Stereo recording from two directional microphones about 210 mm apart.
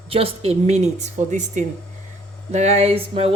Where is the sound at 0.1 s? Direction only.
30° right (ahead or behind).